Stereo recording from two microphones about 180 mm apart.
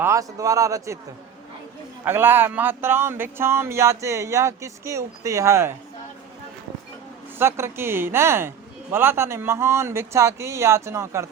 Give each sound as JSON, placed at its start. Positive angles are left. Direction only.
{"t": 0.0, "sound": "speech", "side_deg": -15}
{"t": 2.0, "sound": "speech", "side_deg": -10}
{"t": 7.3, "sound": "speech", "side_deg": -15}